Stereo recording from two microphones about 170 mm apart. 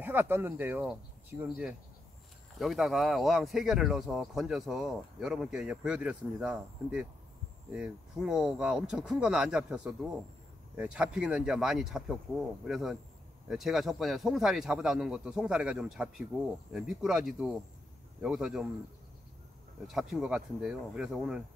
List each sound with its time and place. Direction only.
0.0 s speech: 10° right (ahead or behind)
19.9 s speech: centre (ahead or behind)